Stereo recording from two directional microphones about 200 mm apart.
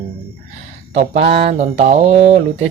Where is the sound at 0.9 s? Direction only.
30° right (ahead or behind).